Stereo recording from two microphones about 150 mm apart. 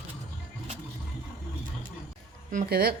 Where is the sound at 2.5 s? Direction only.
75° right (ahead or behind).